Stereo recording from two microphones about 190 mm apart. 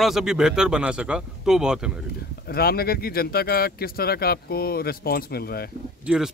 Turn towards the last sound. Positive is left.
turn(degrees=-5)  # may be behind; listen again after turning